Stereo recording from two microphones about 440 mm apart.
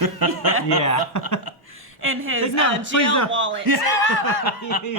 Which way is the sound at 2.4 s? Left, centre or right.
Left.